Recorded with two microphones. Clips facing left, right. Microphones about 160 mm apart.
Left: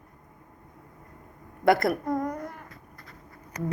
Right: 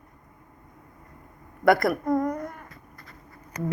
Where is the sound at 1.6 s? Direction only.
25° left (ahead or behind).